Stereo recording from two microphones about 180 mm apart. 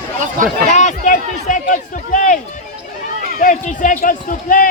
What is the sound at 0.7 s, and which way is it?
Speech, 40° left (ahead or behind).